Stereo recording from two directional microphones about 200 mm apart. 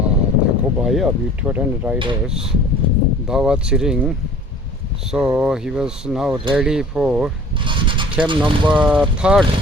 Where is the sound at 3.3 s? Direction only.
5° right (ahead or behind).